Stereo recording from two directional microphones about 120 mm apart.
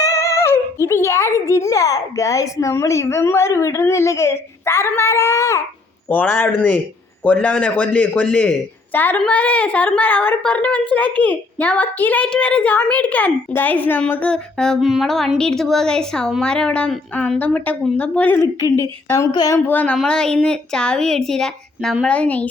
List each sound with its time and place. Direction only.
0.0 s a child's voice: 25° left (ahead or behind)
19.0 s a child's voice: 25° left (ahead or behind)
19.5 s a woman's voice: 15° left (ahead or behind)